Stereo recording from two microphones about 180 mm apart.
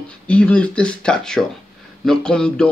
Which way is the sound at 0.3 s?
5° left (ahead or behind).